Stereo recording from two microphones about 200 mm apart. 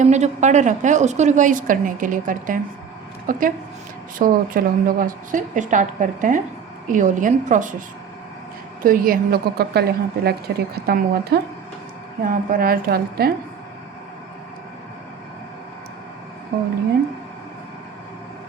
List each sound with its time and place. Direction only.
0.0 s a woman's voice: 35° right (ahead or behind)
8.8 s a woman's voice: 45° right (ahead or behind)
16.5 s a woman's voice: 50° right (ahead or behind)